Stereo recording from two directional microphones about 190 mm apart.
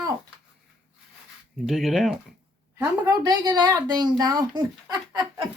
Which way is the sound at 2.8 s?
20° right (ahead or behind).